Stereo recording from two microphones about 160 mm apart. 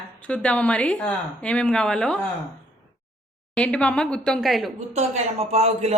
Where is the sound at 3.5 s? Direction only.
5° left (ahead or behind).